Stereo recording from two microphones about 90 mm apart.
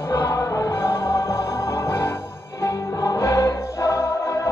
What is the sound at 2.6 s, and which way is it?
Music, 35° left (ahead or behind).